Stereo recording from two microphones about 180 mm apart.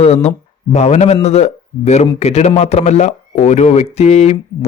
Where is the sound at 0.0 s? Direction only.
35° left (ahead or behind).